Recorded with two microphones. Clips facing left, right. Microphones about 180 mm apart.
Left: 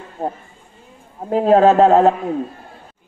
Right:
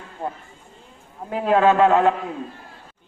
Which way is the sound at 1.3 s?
40° left (ahead or behind).